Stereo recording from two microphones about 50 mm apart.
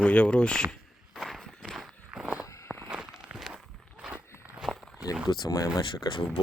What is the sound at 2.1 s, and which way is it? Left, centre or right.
Walk, right.